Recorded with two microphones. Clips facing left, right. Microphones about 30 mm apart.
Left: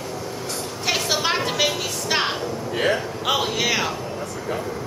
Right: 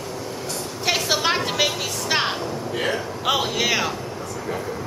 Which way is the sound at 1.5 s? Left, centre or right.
Centre.